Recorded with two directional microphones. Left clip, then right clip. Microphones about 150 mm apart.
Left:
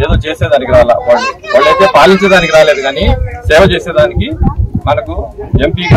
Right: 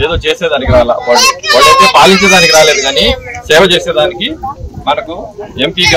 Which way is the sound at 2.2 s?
5° left (ahead or behind).